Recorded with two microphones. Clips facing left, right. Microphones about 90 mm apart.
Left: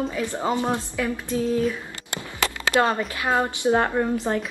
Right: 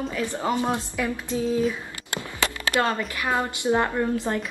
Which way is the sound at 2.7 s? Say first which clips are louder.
Left 4 dB; 20° left (ahead or behind).